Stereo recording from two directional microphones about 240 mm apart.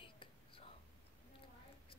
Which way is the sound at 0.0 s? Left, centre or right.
Left.